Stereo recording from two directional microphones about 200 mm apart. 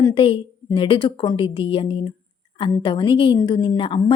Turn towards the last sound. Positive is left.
turn(degrees=25)  # may be behind; listen again after turning